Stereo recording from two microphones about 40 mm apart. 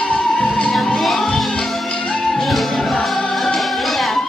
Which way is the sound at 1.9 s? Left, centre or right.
Centre.